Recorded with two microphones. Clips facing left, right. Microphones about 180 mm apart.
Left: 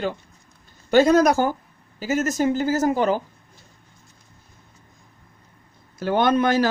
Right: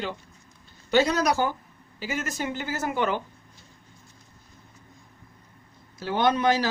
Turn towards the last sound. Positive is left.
turn(degrees=50)  # may be behind; listen again after turning